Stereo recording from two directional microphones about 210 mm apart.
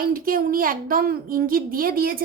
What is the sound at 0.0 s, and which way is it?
A woman's voice, 45° right (ahead or behind).